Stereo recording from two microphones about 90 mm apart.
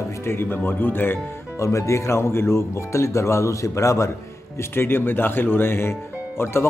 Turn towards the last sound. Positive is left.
turn(degrees=30)  # may be behind; listen again after turning